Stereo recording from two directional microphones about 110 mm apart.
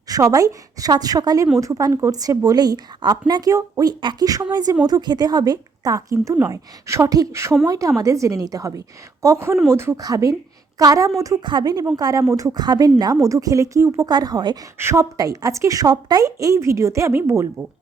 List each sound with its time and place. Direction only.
0.1 s a woman's voice: 30° right (ahead or behind)